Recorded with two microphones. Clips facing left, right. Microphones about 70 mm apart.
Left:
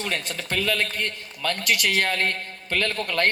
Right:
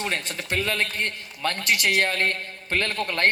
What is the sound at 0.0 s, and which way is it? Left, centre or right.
A man's voice, right.